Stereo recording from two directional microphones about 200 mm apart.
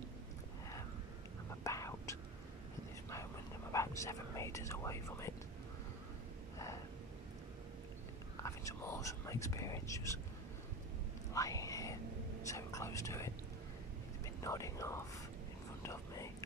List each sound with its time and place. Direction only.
1.6 s whispering: 15° left (ahead or behind)
3.7 s speech: 15° left (ahead or behind)
8.4 s speech: 15° left (ahead or behind)
11.3 s whispering: 15° left (ahead or behind)
12.4 s speech: 15° left (ahead or behind)
14.4 s speech: 15° left (ahead or behind)
15.8 s whispering: 15° left (ahead or behind)